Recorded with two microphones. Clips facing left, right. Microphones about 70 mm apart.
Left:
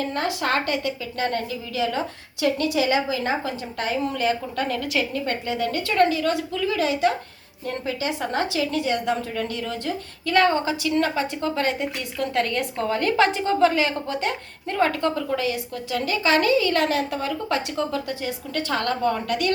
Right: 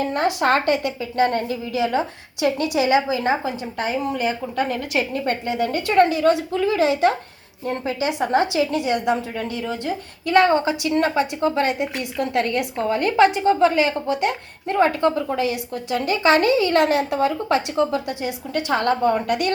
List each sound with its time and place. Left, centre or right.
0.1 s a woman's voice: right
4.8 s a woman's voice: right; by 9.9 s centre
10.2 s a woman's voice: right; by 14.3 s centre
14.7 s a woman's voice: right
17.7 s a woman's voice: centre